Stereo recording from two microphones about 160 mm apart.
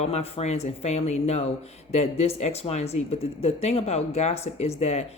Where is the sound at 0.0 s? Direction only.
40° left (ahead or behind).